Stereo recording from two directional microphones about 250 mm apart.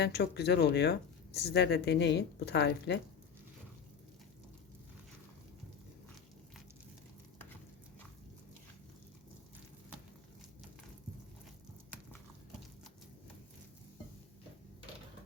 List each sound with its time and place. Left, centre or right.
0.0 s speech: left